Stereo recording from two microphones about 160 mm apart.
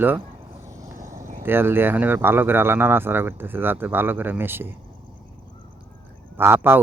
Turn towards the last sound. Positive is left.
turn(degrees=-15)  # may be behind; listen again after turning